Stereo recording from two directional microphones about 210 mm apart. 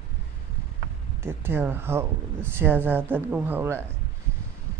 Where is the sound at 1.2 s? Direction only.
10° right (ahead or behind).